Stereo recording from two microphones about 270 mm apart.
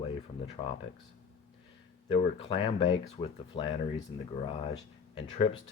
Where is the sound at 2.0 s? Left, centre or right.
Left.